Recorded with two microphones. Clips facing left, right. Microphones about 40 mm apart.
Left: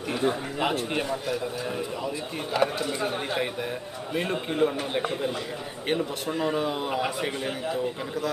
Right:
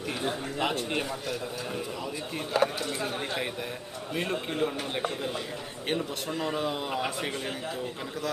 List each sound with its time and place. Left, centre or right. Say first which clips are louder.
0.1 s speech: left 6 dB; centre
2.5 s a man's voice: left 2 dB; centre